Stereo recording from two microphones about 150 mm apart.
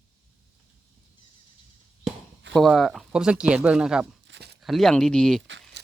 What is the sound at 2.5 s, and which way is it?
Speech, centre (ahead or behind).